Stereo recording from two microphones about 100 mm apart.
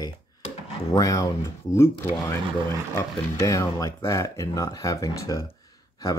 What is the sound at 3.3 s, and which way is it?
Speech, 30° left (ahead or behind).